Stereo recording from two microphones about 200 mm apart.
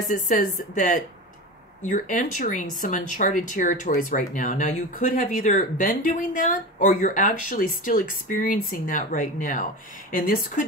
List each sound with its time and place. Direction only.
0.1 s speech: 40° left (ahead or behind)